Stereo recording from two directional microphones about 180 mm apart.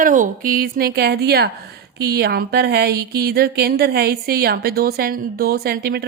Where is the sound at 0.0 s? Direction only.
45° right (ahead or behind).